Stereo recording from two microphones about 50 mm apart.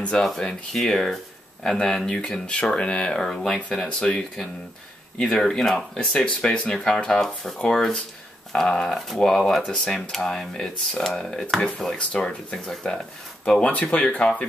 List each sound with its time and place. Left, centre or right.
0.0 s speech: centre
5.4 s speech: centre
8.5 s speech: centre
12.0 s speech: left
13.6 s speech: left